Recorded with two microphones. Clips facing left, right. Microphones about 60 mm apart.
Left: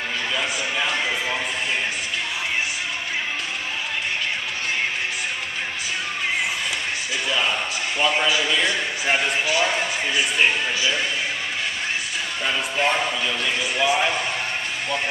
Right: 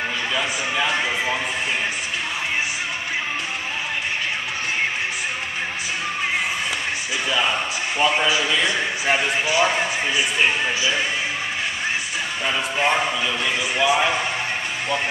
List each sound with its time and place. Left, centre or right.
0.8 s a man's voice: right
7.2 s a sound: centre
8.0 s a man's voice: right
12.7 s a man's voice: centre